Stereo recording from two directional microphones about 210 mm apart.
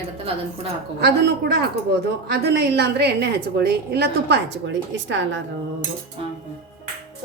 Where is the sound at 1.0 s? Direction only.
50° right (ahead or behind).